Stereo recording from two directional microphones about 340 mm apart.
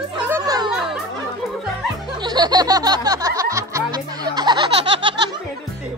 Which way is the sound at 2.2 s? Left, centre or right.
Centre.